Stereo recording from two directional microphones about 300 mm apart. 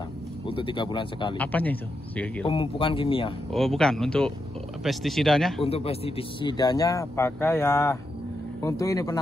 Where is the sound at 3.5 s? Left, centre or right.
Centre.